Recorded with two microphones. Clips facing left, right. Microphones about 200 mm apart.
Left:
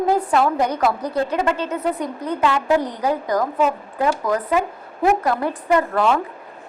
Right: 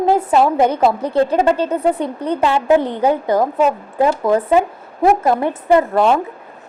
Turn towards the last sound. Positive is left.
turn(degrees=-25)  # may be behind; listen again after turning